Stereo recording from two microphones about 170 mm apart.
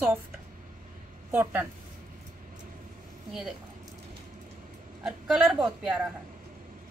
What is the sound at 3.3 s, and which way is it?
Speech, centre (ahead or behind).